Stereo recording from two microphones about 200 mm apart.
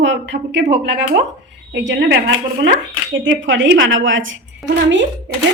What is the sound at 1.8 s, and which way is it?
A woman's voice, 60° right (ahead or behind).